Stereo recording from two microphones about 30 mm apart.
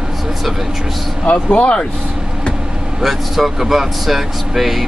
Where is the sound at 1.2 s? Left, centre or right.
Left.